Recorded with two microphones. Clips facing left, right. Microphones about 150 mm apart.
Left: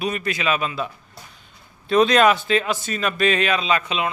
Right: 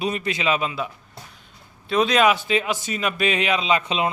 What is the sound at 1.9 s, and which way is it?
Speech, 5° right (ahead or behind).